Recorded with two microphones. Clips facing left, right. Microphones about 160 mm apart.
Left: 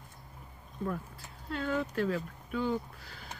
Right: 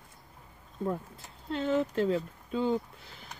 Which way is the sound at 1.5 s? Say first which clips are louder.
Right 4 dB; 25° right (ahead or behind).